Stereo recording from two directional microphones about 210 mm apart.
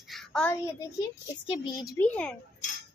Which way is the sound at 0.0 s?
Centre (ahead or behind).